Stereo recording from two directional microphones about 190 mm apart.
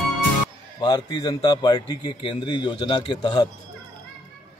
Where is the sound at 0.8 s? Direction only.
20° left (ahead or behind).